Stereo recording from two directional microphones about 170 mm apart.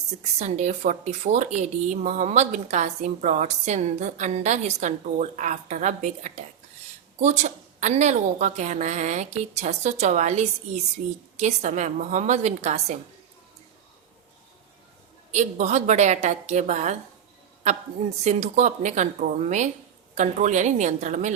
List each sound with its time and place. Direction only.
0.2 s a woman's voice: 40° right (ahead or behind)
15.3 s a woman's voice: 45° right (ahead or behind)
18.2 s a woman's voice: 40° right (ahead or behind)